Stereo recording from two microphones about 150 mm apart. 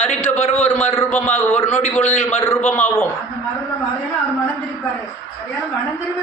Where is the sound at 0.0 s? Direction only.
50° left (ahead or behind).